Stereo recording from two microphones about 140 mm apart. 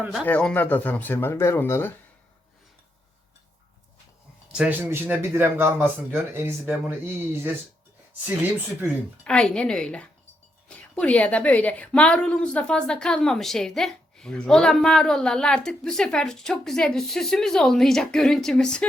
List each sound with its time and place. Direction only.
0.3 s speech: 10° left (ahead or behind)
4.5 s speech: 10° right (ahead or behind)
9.2 s a woman's voice: 5° left (ahead or behind)